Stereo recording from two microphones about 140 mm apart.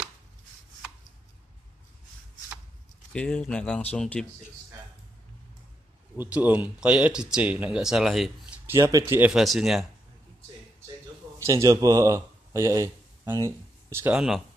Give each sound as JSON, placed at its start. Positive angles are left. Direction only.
{"t": 3.1, "sound": "speech", "side_deg": 5}
{"t": 6.1, "sound": "speech", "side_deg": -10}
{"t": 8.6, "sound": "speech", "side_deg": -20}
{"t": 9.3, "sound": "speech", "side_deg": 0}
{"t": 11.3, "sound": "a man's voice", "side_deg": -20}
{"t": 14.1, "sound": "speech", "side_deg": -5}